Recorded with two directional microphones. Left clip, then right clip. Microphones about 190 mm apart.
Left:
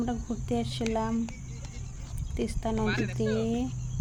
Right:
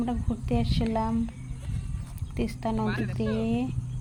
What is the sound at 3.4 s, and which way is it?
Speech, centre (ahead or behind).